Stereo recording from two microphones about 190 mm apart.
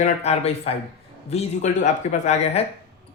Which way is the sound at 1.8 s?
40° left (ahead or behind).